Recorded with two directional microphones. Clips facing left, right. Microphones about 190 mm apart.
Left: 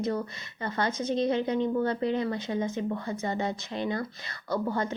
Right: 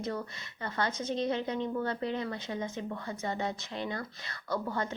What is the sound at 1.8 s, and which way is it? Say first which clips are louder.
Speech: left 6 dB; 20° left (ahead or behind).